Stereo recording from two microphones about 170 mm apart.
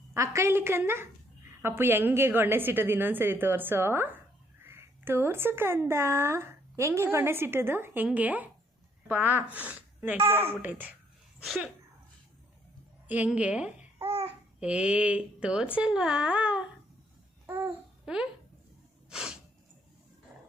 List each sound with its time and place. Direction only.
0.1 s speech: 15° right (ahead or behind)
13.1 s speech: 10° right (ahead or behind)
14.0 s babbling: 35° right (ahead or behind)
14.6 s speech: 5° right (ahead or behind)
17.4 s babbling: 10° right (ahead or behind)
19.1 s snort: 5° right (ahead or behind)